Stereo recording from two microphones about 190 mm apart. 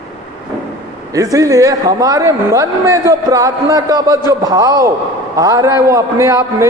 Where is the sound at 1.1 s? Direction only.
20° right (ahead or behind).